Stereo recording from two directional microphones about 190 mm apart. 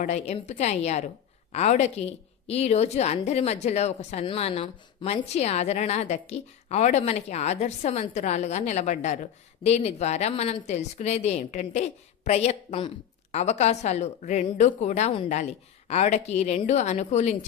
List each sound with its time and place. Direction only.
0.0 s a woman's voice: 35° left (ahead or behind)